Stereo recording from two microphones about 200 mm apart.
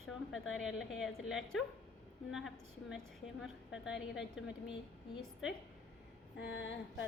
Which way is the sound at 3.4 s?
5° right (ahead or behind).